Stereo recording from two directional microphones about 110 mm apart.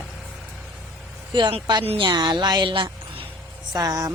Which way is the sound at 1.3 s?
50° right (ahead or behind).